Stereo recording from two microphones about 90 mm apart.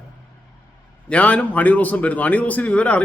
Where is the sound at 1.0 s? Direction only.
15° left (ahead or behind).